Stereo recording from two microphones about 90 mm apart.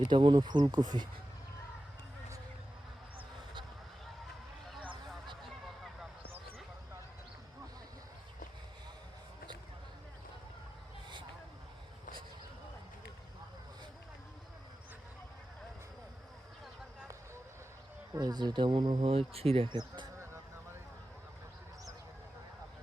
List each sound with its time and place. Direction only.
0.1 s speech: 60° right (ahead or behind)
18.2 s a sound: 50° right (ahead or behind); by 19.7 s 90° right
19.7 s speech: 55° right (ahead or behind)